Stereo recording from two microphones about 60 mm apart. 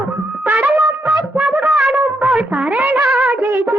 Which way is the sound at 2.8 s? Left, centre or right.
Right.